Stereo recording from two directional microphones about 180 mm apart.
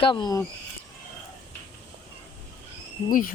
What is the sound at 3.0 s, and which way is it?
Speech, 50° left (ahead or behind).